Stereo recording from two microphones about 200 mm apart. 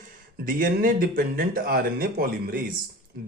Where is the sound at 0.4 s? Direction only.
45° right (ahead or behind).